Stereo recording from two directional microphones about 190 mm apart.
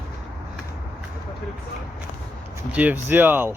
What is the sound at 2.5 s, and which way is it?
Speech, 10° right (ahead or behind).